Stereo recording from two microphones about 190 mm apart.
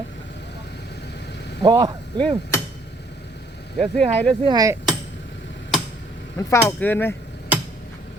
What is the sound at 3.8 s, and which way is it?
Speech, 30° right (ahead or behind).